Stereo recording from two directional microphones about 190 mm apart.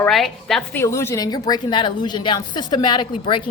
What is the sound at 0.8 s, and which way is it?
A woman's voice, 15° left (ahead or behind).